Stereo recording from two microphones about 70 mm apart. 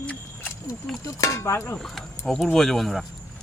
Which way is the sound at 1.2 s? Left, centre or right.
Left.